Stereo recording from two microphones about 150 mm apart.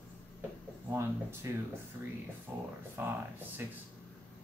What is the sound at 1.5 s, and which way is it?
Speech, 20° right (ahead or behind).